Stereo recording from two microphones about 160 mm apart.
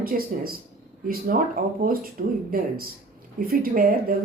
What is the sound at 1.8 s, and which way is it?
Speech, 65° right (ahead or behind).